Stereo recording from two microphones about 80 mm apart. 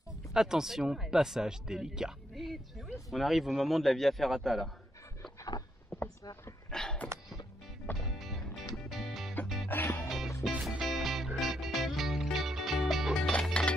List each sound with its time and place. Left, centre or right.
0.3 s speech: centre
5.9 s a sound: centre
6.7 s a sound: centre
8.1 s music: centre
9.7 s music: left
10.0 s music: centre
13.3 s music: centre